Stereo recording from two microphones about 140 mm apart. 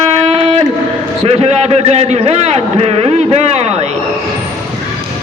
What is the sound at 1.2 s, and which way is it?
A man's voice, 45° right (ahead or behind).